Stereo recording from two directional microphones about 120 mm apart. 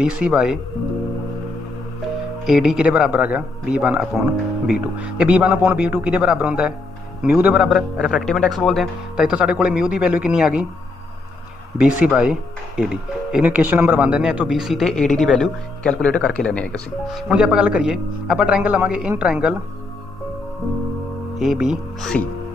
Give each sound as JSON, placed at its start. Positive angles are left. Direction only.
{"t": 0.0, "sound": "speech", "side_deg": -10}
{"t": 2.4, "sound": "speech", "side_deg": -5}
{"t": 11.8, "sound": "speech", "side_deg": -5}
{"t": 17.3, "sound": "speech", "side_deg": -5}
{"t": 21.4, "sound": "speech", "side_deg": -5}